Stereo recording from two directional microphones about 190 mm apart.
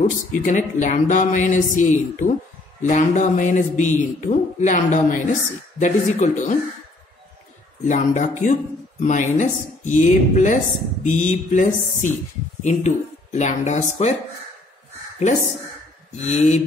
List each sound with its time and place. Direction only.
0.3 s a man's voice: 40° left (ahead or behind)
7.8 s a man's voice: 40° left (ahead or behind)
16.2 s a man's voice: 35° left (ahead or behind)